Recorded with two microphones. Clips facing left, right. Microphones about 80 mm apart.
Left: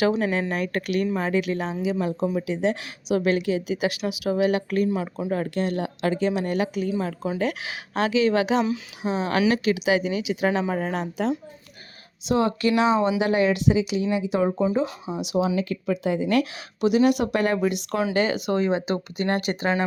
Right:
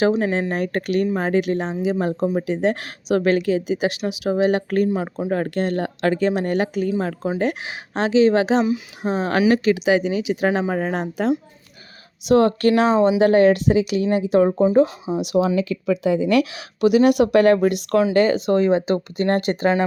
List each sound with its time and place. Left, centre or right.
0.2 s a woman's voice: right
3.7 s a woman's voice: right
5.3 s speech: right
7.3 s a woman's voice: right
12.2 s speech: right
15.0 s speech: centre
15.3 s speech: right
16.2 s a woman's voice: right